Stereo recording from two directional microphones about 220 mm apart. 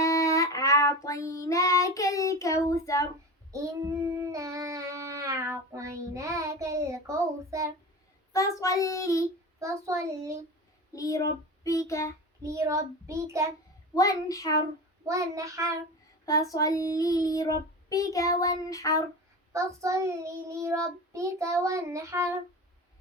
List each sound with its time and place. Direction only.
0.0 s child singing: 15° left (ahead or behind)
3.5 s child singing: 15° right (ahead or behind)
8.3 s child singing: 15° left (ahead or behind)
9.6 s child singing: 15° right (ahead or behind)
10.9 s child singing: 15° left (ahead or behind)
12.4 s child singing: 15° right (ahead or behind)
13.9 s child singing: 15° left (ahead or behind)
15.0 s child singing: 15° right (ahead or behind)
16.2 s child singing: 15° left (ahead or behind)
19.5 s child singing: 15° right (ahead or behind)